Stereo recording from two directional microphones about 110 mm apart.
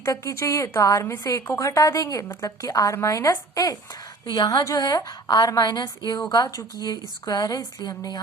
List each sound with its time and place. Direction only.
0.0 s a woman's voice: 30° left (ahead or behind)